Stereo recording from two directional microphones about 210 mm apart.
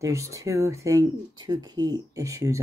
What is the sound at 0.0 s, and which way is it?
Speech, 15° right (ahead or behind).